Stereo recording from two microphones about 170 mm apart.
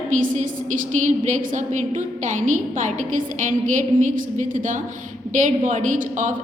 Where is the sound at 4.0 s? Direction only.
50° right (ahead or behind).